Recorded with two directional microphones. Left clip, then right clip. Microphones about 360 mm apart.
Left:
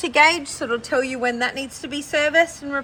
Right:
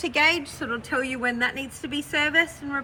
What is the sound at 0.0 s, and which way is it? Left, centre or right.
A woman's voice, left.